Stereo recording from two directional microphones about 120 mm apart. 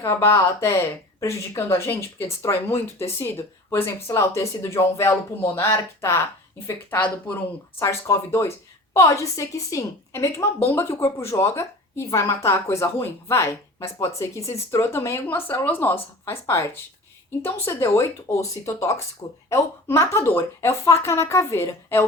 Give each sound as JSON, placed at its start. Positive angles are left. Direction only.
{"t": 0.0, "sound": "a woman's voice", "side_deg": 20}
{"t": 7.8, "sound": "a woman's voice", "side_deg": 25}